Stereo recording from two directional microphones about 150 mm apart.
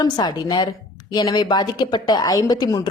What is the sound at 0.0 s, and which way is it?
A woman's voice, 30° left (ahead or behind).